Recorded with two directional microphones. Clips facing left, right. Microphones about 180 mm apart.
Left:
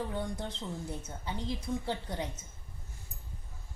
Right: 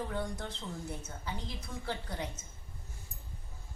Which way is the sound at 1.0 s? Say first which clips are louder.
Left 4 dB; 20° left (ahead or behind).